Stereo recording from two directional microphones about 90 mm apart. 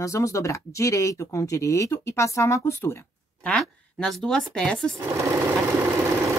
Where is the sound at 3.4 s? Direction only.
5° left (ahead or behind).